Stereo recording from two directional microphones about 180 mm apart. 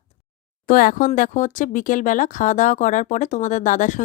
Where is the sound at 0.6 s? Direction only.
50° left (ahead or behind).